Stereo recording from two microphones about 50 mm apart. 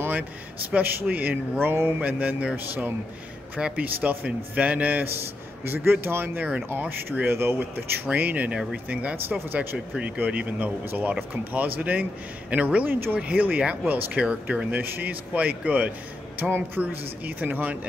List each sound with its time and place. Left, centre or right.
0.7 s speech: right
1.6 s speech: right
2.0 s speech: right
3.5 s speech: right
5.7 s speech: right
8.1 s speech: right
9.1 s speech: right
9.9 s speech: right
14.8 s speech: right
15.3 s speech: right
16.3 s speech: right